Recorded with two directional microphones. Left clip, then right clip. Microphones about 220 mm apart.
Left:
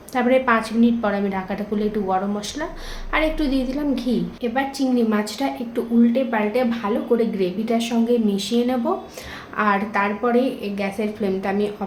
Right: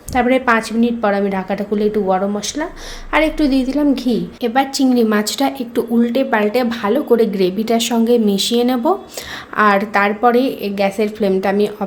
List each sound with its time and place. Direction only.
0.1 s a woman's voice: 35° right (ahead or behind)
4.4 s a woman's voice: 50° right (ahead or behind)